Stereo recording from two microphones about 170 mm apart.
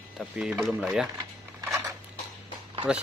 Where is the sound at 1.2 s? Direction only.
20° right (ahead or behind).